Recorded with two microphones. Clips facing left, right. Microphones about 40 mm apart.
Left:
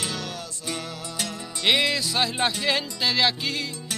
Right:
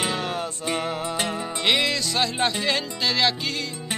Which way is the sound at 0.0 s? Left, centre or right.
Right.